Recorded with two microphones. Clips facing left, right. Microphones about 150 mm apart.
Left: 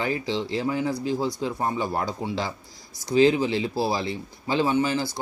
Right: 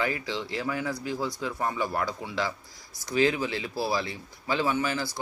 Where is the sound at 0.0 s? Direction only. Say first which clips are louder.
Left 4 dB; 25° left (ahead or behind).